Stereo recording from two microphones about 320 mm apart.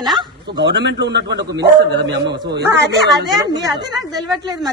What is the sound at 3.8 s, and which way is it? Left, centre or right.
Speech, centre.